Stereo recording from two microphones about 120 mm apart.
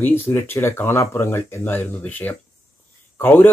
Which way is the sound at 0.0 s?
20° left (ahead or behind).